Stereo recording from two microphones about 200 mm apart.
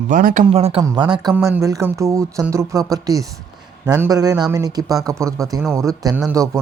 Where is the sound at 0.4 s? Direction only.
30° right (ahead or behind).